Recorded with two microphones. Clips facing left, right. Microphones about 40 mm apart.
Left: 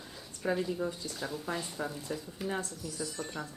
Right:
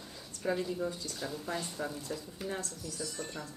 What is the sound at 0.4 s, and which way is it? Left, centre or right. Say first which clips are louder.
Speech: left 1 dB; centre.